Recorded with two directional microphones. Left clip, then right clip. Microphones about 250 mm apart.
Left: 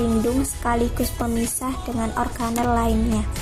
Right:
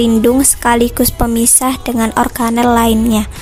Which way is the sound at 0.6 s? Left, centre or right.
Right.